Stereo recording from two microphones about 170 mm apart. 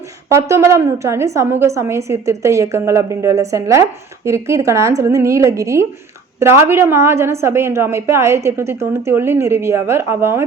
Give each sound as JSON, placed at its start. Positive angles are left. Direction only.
{"t": 0.3, "sound": "a woman's voice", "side_deg": -15}